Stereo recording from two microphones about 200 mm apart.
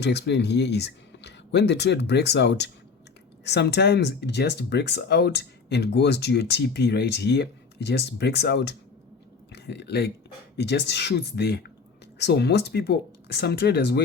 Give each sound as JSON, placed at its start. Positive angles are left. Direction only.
{"t": 0.0, "sound": "speech", "side_deg": 60}